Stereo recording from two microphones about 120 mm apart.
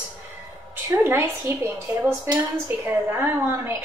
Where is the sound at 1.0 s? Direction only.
20° right (ahead or behind).